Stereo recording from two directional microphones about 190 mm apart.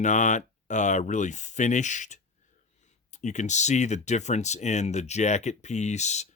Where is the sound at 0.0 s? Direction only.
40° left (ahead or behind).